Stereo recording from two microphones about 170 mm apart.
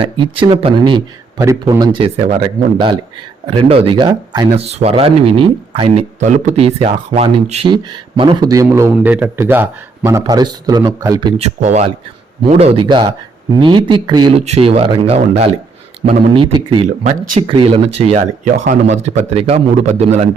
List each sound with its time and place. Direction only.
0.0 s a man's voice: 30° right (ahead or behind)
4.7 s speech: 35° right (ahead or behind)
7.7 s a man's voice: 25° right (ahead or behind)
11.3 s a man's voice: 40° right (ahead or behind); by 14.3 s 25° right (ahead or behind)
14.3 s a man's voice: 35° right (ahead or behind)